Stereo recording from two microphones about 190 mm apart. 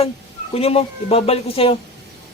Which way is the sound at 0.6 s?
35° left (ahead or behind).